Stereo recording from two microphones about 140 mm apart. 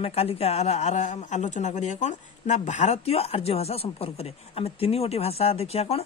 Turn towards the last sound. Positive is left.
turn(degrees=45)  # may be behind; listen again after turning